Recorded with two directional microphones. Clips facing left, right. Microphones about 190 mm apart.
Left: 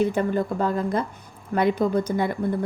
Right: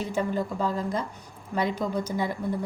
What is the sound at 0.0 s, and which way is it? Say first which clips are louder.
A woman's voice: left 6 dB; 60° left (ahead or behind).